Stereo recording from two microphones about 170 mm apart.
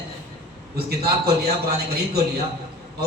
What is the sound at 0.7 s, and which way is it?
A man's voice, 65° right (ahead or behind).